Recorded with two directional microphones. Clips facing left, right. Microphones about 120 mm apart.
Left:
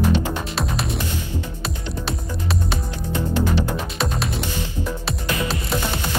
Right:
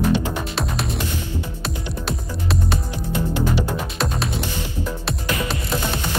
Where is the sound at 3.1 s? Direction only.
15° right (ahead or behind).